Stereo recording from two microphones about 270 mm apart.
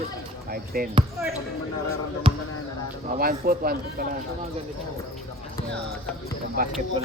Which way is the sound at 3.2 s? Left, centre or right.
Right.